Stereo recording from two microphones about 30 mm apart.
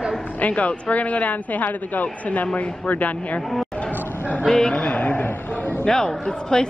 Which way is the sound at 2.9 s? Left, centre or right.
Left.